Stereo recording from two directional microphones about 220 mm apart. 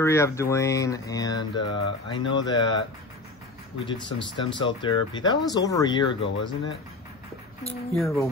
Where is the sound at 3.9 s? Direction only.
20° left (ahead or behind).